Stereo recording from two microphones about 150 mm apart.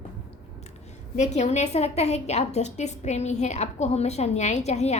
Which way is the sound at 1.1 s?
50° left (ahead or behind).